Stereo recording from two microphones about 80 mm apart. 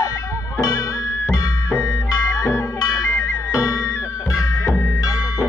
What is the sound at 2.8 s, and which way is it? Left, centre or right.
Music, left.